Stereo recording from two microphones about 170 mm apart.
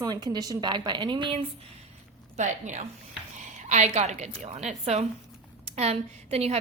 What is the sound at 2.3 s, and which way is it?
A woman's voice, 45° right (ahead or behind).